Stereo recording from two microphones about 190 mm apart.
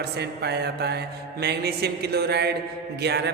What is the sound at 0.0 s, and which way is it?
A woman's voice, 60° right (ahead or behind).